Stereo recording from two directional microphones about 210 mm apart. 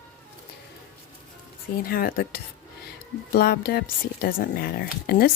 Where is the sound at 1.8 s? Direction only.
45° left (ahead or behind).